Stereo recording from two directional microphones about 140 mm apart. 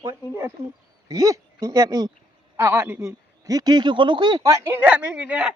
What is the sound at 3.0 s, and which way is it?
Speech, 25° right (ahead or behind).